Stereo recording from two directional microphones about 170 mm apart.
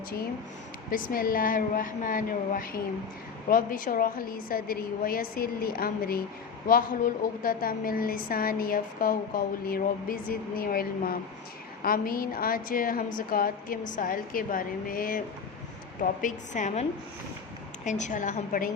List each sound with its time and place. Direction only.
0.9 s a woman's voice: 55° left (ahead or behind)
17.8 s a woman's voice: 45° left (ahead or behind)